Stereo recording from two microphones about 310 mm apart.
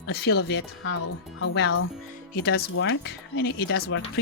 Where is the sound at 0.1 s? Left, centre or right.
Left.